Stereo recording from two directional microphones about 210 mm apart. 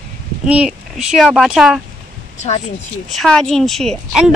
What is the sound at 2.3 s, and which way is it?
Speech, 30° left (ahead or behind).